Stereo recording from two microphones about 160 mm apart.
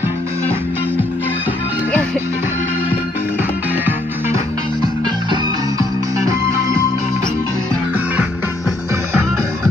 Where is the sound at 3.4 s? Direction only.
10° right (ahead or behind).